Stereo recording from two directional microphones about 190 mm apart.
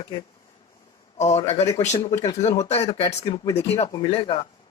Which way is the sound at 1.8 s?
35° left (ahead or behind).